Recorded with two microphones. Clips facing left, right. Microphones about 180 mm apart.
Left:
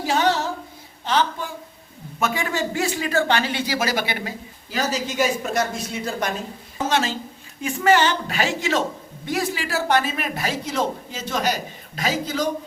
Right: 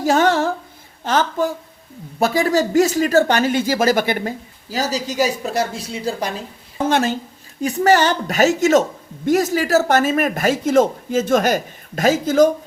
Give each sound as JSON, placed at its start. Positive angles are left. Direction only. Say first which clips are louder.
{"t": 0.0, "sound": "a sound", "louder": "right 5 dB", "side_deg": -45}
{"t": 1.0, "sound": "speech", "louder": "right 4 dB", "side_deg": -45}
{"t": 6.7, "sound": "a woman's voice", "louder": "right 5 dB", "side_deg": -55}
{"t": 7.6, "sound": "speech", "louder": "right 3 dB", "side_deg": -40}